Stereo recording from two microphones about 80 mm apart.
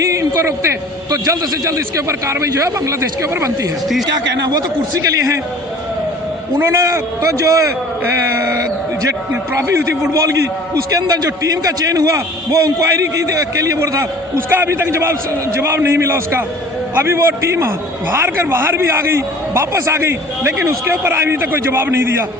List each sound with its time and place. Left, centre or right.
0.0 s a man's voice: right
4.0 s a man's voice: right
6.6 s a man's voice: right
9.3 s a man's voice: right